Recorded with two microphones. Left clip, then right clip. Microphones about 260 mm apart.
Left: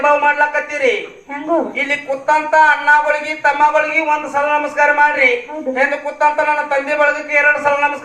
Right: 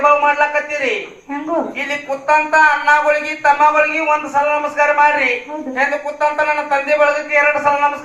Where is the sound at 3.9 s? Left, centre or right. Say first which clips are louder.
Even; left.